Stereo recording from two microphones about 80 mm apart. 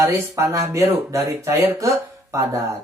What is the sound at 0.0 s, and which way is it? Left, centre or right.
Speech, right.